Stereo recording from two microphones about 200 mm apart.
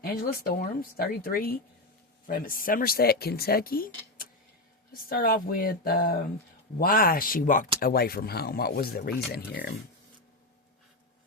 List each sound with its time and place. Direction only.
0.0 s speech: 50° left (ahead or behind)